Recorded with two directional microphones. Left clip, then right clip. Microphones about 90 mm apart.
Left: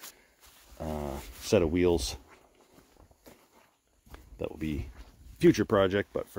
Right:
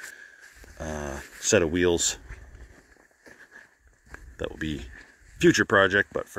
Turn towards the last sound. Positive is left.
turn(degrees=5)  # may be behind; listen again after turning